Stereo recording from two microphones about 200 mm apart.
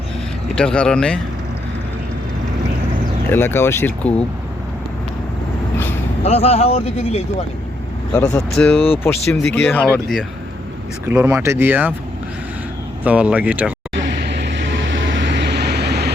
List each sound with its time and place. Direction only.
0.5 s speech: 5° left (ahead or behind)
3.2 s speech: 10° left (ahead or behind)
6.2 s speech: 30° left (ahead or behind)
8.1 s speech: 5° left (ahead or behind)
8.7 s speech: 30° left (ahead or behind)
9.0 s speech: 10° left (ahead or behind)
11.1 s speech: 10° right (ahead or behind)
13.1 s speech: 5° right (ahead or behind)
14.1 s vehicle: 60° right (ahead or behind)